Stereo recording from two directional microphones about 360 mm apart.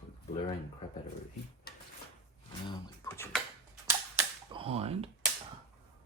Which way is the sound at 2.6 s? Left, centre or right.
Centre.